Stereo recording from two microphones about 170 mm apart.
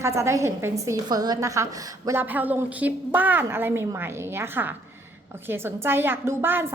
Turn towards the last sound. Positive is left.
turn(degrees=-10)  # may be behind; listen again after turning